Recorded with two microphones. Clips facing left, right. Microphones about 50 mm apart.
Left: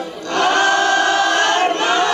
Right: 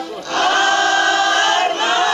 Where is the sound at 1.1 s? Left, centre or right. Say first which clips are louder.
Even; right.